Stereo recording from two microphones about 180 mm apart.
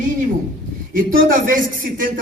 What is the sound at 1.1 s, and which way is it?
A man's voice, 50° right (ahead or behind).